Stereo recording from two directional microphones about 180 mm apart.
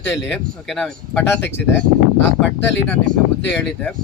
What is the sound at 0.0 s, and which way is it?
Speech, 10° left (ahead or behind).